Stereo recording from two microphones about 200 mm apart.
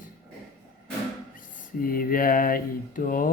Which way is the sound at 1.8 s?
45° left (ahead or behind).